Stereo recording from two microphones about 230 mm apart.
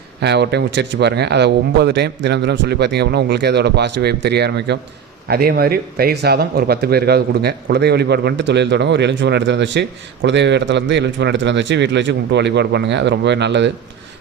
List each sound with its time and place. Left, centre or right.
0.2 s speech: right